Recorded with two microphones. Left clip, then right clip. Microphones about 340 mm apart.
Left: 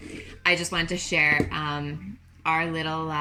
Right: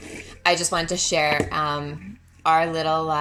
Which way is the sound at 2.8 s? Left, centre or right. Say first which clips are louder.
Right 7 dB; right.